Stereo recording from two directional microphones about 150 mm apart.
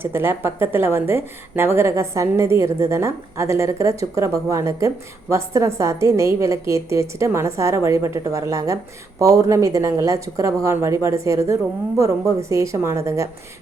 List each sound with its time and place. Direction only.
0.0 s a woman's voice: 15° right (ahead or behind)